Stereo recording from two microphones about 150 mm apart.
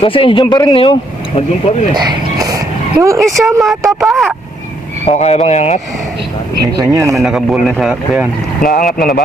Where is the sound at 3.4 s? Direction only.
10° right (ahead or behind).